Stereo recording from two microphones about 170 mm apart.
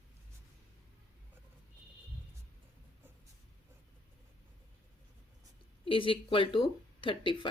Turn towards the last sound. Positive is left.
turn(degrees=30)  # may be behind; listen again after turning